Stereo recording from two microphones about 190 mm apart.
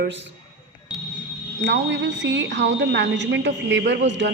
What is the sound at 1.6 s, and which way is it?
Speech, 70° right (ahead or behind).